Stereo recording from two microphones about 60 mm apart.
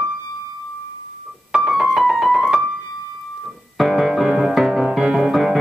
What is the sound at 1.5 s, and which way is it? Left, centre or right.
Keyboard, centre.